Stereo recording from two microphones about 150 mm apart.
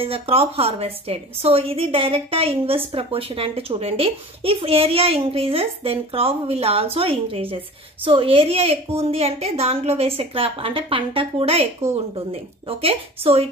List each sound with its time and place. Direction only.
0.0 s a woman's voice: 40° right (ahead or behind)